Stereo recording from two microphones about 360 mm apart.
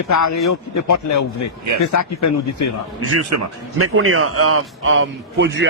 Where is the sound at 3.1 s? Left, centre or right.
Right.